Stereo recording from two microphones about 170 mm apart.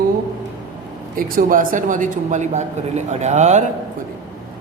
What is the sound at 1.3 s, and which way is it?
A man's voice, 50° right (ahead or behind).